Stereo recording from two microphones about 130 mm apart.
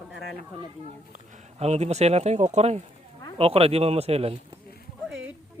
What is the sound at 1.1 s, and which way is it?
Speech, 65° right (ahead or behind).